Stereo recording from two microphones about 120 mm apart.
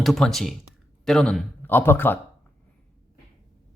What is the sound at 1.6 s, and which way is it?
Speech, 20° left (ahead or behind).